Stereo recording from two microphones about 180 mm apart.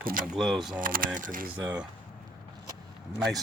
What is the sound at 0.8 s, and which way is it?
Speech, 50° right (ahead or behind).